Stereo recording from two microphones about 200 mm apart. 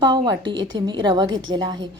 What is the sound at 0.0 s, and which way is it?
A woman's voice, 20° right (ahead or behind).